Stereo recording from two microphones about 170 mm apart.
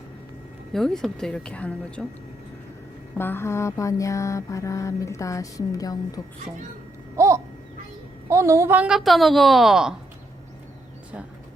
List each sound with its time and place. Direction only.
0.7 s a woman's voice: centre (ahead or behind)
3.2 s mantra: 15° left (ahead or behind)
7.2 s babbling: 15° right (ahead or behind)
8.3 s a woman's voice: 15° right (ahead or behind)